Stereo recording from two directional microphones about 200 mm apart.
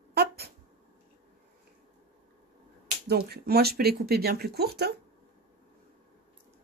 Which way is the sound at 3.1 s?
50° right (ahead or behind).